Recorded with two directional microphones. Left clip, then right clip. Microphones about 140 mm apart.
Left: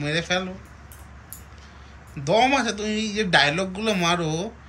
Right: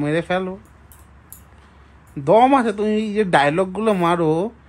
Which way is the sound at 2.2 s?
50° right (ahead or behind).